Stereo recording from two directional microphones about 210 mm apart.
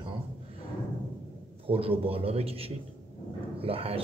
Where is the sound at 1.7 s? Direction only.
25° right (ahead or behind).